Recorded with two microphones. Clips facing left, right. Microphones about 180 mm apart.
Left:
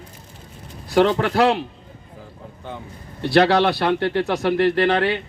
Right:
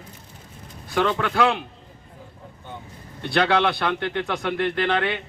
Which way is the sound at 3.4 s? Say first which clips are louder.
Left 2 dB; 40° left (ahead or behind).